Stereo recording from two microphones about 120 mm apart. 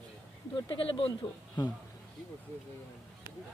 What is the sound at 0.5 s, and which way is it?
Speech, 50° left (ahead or behind).